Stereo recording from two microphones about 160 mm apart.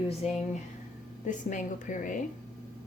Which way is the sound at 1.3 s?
50° left (ahead or behind).